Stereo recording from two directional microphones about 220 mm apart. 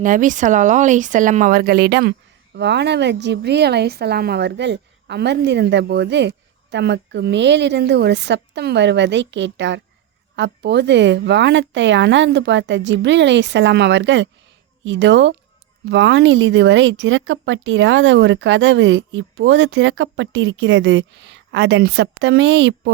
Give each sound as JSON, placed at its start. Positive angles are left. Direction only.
{"t": 0.0, "sound": "a woman's voice", "side_deg": -35}